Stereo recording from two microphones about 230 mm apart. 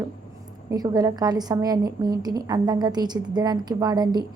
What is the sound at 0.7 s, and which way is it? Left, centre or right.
A woman's voice, centre.